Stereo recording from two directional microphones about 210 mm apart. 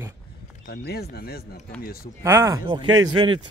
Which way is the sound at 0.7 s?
50° left (ahead or behind).